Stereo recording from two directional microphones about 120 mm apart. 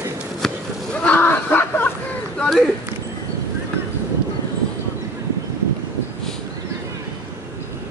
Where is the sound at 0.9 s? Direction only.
15° left (ahead or behind).